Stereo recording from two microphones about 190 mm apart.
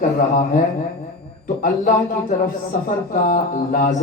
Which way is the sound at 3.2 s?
45° left (ahead or behind).